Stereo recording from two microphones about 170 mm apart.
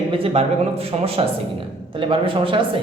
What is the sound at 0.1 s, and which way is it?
A man's voice, 35° right (ahead or behind).